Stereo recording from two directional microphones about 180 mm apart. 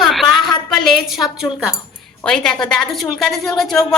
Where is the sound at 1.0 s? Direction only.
Centre (ahead or behind).